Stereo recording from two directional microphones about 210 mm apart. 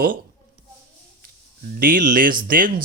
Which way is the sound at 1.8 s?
40° right (ahead or behind).